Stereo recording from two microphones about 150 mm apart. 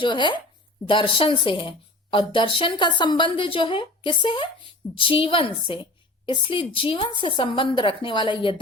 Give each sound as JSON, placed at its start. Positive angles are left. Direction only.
{"t": 0.0, "sound": "speech", "side_deg": 30}